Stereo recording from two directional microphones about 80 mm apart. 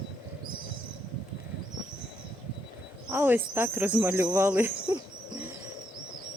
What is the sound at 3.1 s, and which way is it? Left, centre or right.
Speech, right.